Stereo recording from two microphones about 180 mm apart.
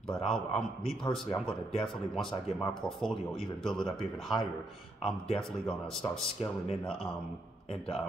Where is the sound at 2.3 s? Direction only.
25° left (ahead or behind).